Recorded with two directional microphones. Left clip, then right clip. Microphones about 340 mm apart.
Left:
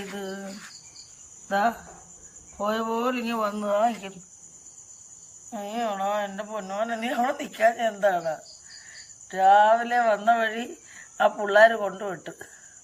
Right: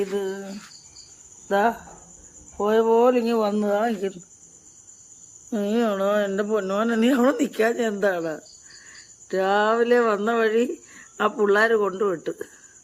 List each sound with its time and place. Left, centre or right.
0.2 s speech: centre
1.5 s speech: centre
5.5 s speech: centre